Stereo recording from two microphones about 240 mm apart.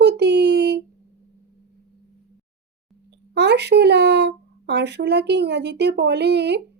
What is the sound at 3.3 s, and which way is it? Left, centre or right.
Speech, right.